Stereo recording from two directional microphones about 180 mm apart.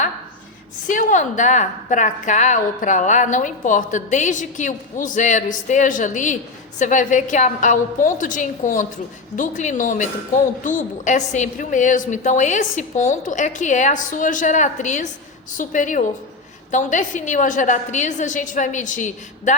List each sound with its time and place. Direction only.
0.9 s a woman's voice: 45° left (ahead or behind)